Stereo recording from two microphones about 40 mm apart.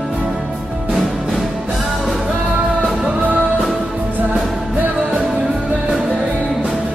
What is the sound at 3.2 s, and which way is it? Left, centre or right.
Music, right.